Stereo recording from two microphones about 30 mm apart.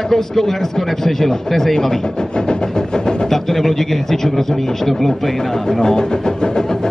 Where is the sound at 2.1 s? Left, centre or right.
Left.